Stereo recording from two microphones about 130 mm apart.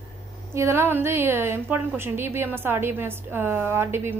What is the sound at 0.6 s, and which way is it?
A woman's voice, 20° right (ahead or behind).